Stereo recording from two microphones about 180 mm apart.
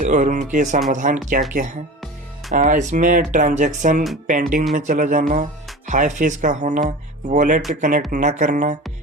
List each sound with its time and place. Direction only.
0.0 s speech: 45° right (ahead or behind)
2.5 s speech: 55° right (ahead or behind)